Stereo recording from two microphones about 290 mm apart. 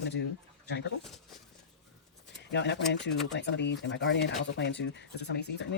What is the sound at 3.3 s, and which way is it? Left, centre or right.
Speech, left.